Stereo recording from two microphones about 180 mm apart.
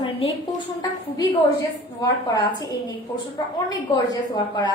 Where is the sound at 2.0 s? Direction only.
20° left (ahead or behind).